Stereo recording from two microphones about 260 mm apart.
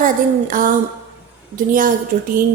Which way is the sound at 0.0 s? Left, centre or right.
Right.